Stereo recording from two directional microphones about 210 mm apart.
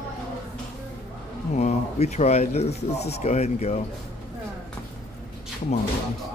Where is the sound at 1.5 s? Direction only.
35° left (ahead or behind).